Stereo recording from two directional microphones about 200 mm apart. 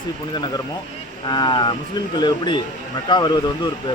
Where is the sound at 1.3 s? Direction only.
20° left (ahead or behind).